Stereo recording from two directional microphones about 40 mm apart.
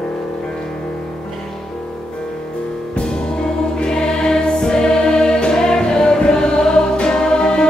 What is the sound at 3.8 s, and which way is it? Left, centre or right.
Music, centre.